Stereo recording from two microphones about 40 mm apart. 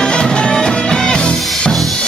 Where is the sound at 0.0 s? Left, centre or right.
Left.